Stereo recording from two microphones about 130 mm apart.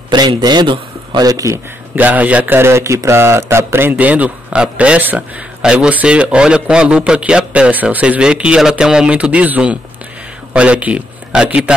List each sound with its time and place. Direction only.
0.1 s a man's voice: 35° right (ahead or behind)
2.0 s a man's voice: 10° right (ahead or behind)